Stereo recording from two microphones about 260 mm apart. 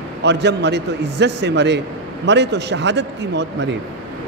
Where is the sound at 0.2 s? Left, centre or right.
Right.